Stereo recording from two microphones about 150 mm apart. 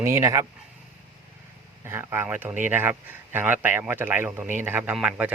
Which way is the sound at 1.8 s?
15° right (ahead or behind).